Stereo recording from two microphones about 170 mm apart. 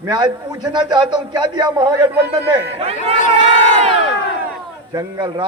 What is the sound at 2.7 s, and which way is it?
Speech, 35° right (ahead or behind).